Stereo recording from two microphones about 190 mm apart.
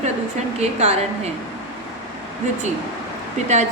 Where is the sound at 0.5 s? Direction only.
35° right (ahead or behind).